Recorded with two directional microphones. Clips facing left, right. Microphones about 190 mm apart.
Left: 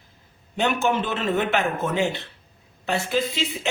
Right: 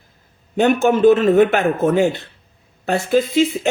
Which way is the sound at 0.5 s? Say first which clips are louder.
Right 8 dB; 45° right (ahead or behind).